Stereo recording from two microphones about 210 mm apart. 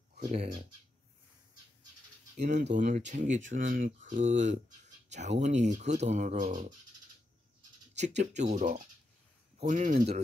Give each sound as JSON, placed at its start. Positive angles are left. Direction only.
{"t": 0.2, "sound": "speech", "side_deg": -30}
{"t": 2.7, "sound": "speech", "side_deg": -35}
{"t": 7.9, "sound": "speech", "side_deg": -35}